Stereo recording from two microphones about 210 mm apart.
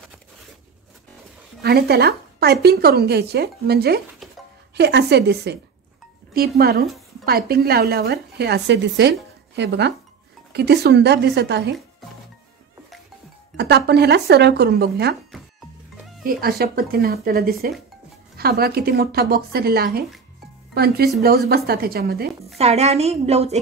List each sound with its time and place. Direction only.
1.6 s a woman's voice: 50° right (ahead or behind)
13.6 s a woman's voice: 50° right (ahead or behind)
16.3 s a woman's voice: 45° right (ahead or behind)
22.6 s a woman's voice: 30° right (ahead or behind)